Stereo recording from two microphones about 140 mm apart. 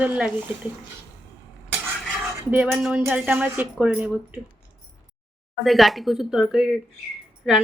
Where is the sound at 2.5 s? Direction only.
10° right (ahead or behind).